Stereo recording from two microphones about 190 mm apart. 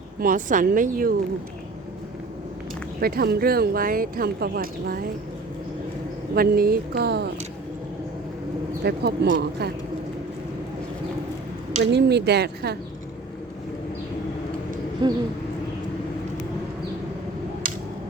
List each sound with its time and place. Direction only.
0.2 s speech: 45° right (ahead or behind)
3.0 s speech: 55° right (ahead or behind)
6.3 s speech: 50° right (ahead or behind)
8.8 s speech: 60° right (ahead or behind)
11.8 s speech: 60° right (ahead or behind)
15.0 s a sound: 25° right (ahead or behind)